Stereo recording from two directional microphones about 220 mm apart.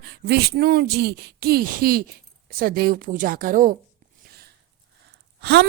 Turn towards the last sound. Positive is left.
turn(degrees=-50)  # may be behind; listen again after turning